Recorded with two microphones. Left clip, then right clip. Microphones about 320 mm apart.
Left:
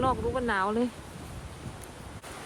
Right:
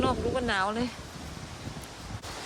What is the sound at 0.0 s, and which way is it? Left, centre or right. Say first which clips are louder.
Speech: even; centre.